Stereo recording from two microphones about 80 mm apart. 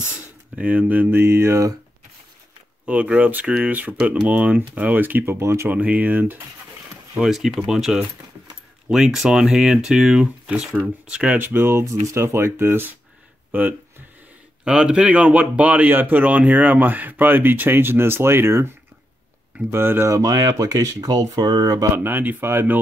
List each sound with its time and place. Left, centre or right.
0.6 s speech: centre
2.9 s speech: centre
5.4 s speech: right
5.7 s speech: right
7.2 s speech: centre
11.3 s speech: right
19.7 s speech: right
20.1 s speech: right
21.9 s speech: right